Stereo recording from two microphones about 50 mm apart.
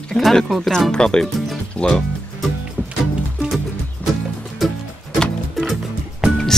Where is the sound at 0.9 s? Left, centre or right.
Centre.